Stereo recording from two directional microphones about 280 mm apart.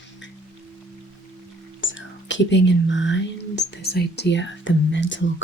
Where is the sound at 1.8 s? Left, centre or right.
Left.